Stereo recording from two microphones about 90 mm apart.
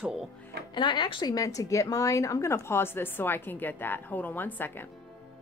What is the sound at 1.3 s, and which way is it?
Speech, 40° left (ahead or behind).